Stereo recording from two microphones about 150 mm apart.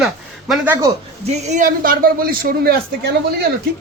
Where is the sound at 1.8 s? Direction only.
75° right (ahead or behind).